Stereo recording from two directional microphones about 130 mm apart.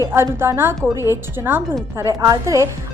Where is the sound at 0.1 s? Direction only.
20° right (ahead or behind).